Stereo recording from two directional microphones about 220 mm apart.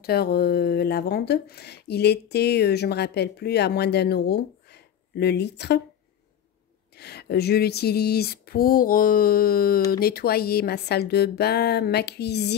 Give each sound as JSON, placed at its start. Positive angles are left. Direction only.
{"t": 0.0, "sound": "speech", "side_deg": 45}
{"t": 7.0, "sound": "speech", "side_deg": 45}